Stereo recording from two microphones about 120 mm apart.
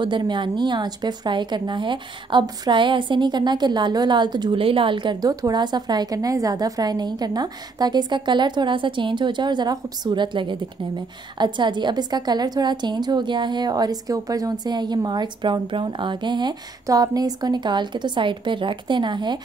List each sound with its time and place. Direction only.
0.0 s speech: 40° right (ahead or behind)